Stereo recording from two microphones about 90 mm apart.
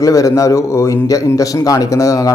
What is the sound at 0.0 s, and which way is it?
A man's voice, 40° left (ahead or behind).